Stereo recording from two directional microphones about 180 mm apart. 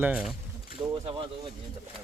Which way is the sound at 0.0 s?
5° right (ahead or behind).